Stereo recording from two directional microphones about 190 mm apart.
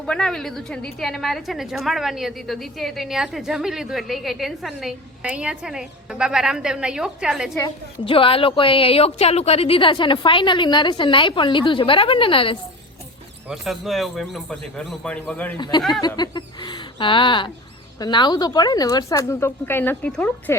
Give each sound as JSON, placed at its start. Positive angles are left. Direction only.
{"t": 0.0, "sound": "a woman's voice", "side_deg": 5}
{"t": 8.0, "sound": "a woman's voice", "side_deg": 30}
{"t": 13.5, "sound": "a woman's voice", "side_deg": 0}
{"t": 15.5, "sound": "a woman's voice", "side_deg": 25}